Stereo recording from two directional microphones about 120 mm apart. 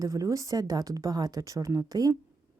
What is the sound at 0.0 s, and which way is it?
A woman's voice, 25° right (ahead or behind).